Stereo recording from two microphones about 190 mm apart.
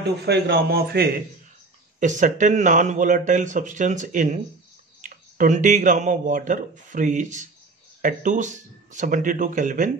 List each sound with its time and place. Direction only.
0.0 s a man's voice: 60° right (ahead or behind)
2.0 s speech: 40° right (ahead or behind)